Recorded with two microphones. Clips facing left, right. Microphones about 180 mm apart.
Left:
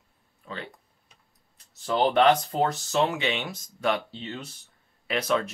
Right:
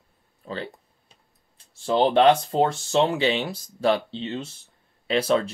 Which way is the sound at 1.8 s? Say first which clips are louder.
Right 3 dB; 25° right (ahead or behind).